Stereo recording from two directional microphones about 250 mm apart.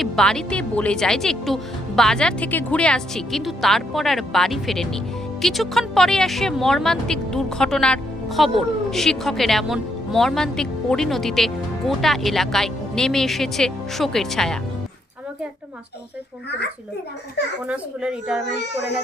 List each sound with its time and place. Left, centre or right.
0.0 s speech: centre
17.7 s speech: centre
18.4 s a child's voice: left